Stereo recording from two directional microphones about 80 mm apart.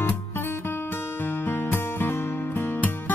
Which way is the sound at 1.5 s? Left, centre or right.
Left.